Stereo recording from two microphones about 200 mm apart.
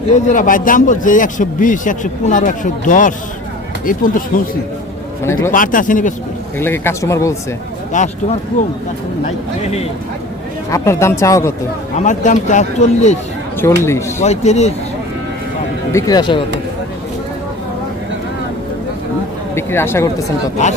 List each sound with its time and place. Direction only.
0.1 s speech: 40° left (ahead or behind)
5.2 s speech: 15° left (ahead or behind)
5.5 s speech: 40° left (ahead or behind)
6.6 s speech: 10° left (ahead or behind)
7.9 s speech: 35° left (ahead or behind)
10.7 s speech: 15° left (ahead or behind)
11.9 s speech: 40° left (ahead or behind)
13.6 s speech: 15° left (ahead or behind)
14.2 s speech: 35° left (ahead or behind)
15.9 s speech: 15° left (ahead or behind)
19.5 s speech: 10° left (ahead or behind)